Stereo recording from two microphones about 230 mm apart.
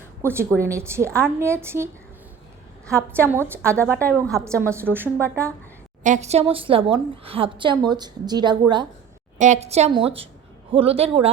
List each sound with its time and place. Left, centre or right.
0.2 s a woman's voice: centre
2.9 s a woman's voice: centre
6.0 s a woman's voice: right
9.4 s a woman's voice: right